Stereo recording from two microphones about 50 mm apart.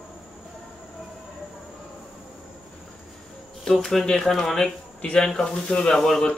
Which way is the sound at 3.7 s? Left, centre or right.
Centre.